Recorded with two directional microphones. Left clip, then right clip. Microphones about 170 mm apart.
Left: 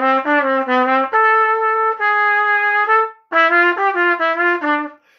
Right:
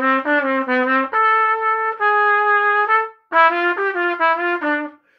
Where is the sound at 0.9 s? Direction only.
30° left (ahead or behind).